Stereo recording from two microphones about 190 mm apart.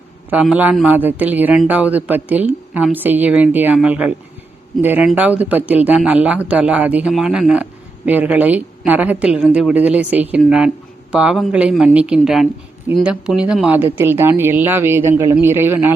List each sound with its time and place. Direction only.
0.3 s speech: 5° right (ahead or behind)